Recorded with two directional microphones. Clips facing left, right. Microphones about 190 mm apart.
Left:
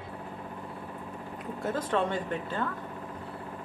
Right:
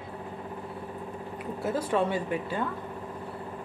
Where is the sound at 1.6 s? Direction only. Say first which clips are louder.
Right 2 dB; 10° right (ahead or behind).